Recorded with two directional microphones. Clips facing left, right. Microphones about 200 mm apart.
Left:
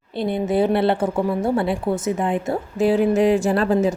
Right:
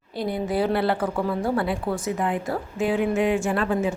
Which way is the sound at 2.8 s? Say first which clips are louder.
Left 6 dB; 35° left (ahead or behind).